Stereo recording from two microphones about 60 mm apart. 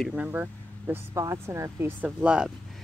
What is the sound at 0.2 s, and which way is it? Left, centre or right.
Speech, right.